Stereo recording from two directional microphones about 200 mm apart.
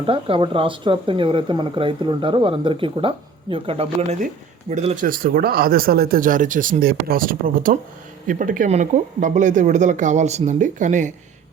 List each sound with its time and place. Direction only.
0.0 s speech: 25° right (ahead or behind)
5.0 s speech: 45° right (ahead or behind)